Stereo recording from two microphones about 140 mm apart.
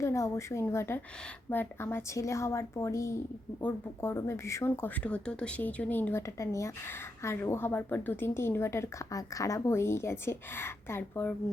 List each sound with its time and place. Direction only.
0.0 s a woman's voice: 20° left (ahead or behind)